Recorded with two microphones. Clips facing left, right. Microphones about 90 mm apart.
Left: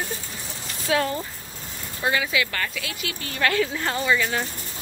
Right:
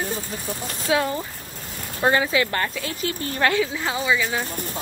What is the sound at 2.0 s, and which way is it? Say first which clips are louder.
A woman's voice: right 4 dB; 35° right (ahead or behind).